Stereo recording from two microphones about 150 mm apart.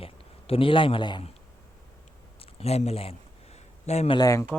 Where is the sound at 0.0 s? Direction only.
40° left (ahead or behind).